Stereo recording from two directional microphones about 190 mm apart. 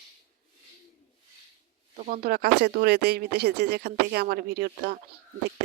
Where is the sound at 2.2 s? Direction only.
55° right (ahead or behind).